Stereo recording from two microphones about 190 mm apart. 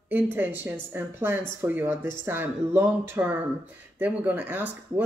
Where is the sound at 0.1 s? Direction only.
10° right (ahead or behind).